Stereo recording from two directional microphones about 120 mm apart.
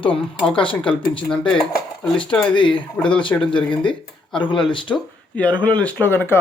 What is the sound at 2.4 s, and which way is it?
Speech, 40° left (ahead or behind).